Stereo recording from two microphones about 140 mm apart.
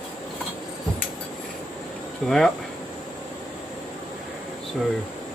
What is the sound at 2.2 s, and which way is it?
Speech, 5° left (ahead or behind).